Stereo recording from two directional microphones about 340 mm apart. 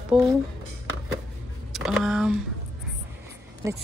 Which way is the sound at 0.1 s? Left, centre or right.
Centre.